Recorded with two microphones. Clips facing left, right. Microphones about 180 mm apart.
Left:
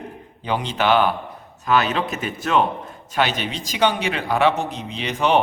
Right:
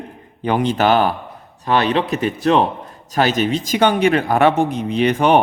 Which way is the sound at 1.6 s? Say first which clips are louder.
Right 3 dB; 35° right (ahead or behind).